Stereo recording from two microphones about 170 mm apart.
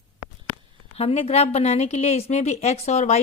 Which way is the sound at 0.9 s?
35° left (ahead or behind).